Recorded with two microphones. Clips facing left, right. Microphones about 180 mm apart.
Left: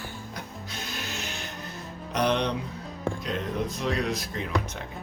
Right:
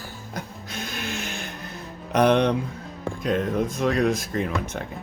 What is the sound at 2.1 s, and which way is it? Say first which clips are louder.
Speech: right 7 dB; 55° right (ahead or behind).